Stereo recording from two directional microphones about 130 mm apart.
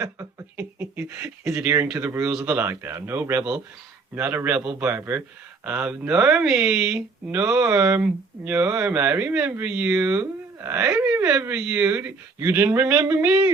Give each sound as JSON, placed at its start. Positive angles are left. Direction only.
{"t": 0.0, "sound": "speech", "side_deg": -25}
{"t": 0.5, "sound": "a sound", "side_deg": -15}
{"t": 1.6, "sound": "speech", "side_deg": -15}
{"t": 7.7, "sound": "speech", "side_deg": -20}
{"t": 12.4, "sound": "speech", "side_deg": -20}